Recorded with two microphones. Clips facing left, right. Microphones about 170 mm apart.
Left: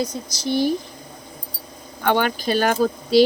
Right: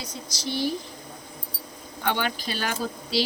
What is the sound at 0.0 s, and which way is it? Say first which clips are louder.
Speech: left 9 dB; 45° left (ahead or behind).